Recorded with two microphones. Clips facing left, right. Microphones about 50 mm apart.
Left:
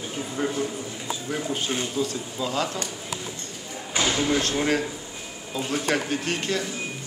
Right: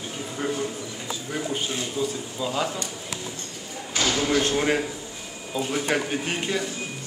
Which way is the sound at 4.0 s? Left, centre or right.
Centre.